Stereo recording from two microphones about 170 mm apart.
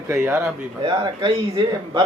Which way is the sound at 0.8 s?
25° right (ahead or behind).